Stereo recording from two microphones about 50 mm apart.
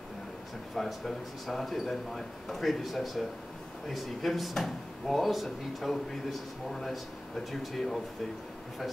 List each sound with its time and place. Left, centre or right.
0.7 s speech: centre